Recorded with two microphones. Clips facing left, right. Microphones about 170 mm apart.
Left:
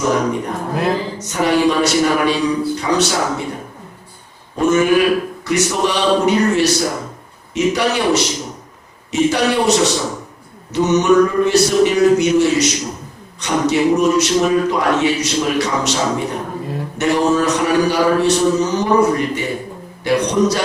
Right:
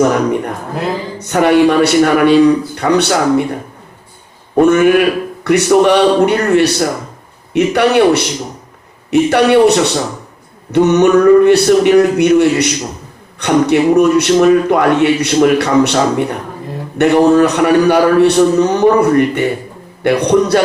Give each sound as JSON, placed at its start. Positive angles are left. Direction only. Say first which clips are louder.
{"t": 0.0, "sound": "a man's voice", "louder": "right 5 dB", "side_deg": -60}
{"t": 4.5, "sound": "a man's voice", "louder": "right 5 dB", "side_deg": -60}